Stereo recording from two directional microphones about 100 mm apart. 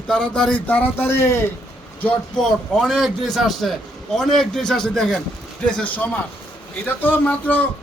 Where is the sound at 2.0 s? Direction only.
5° left (ahead or behind).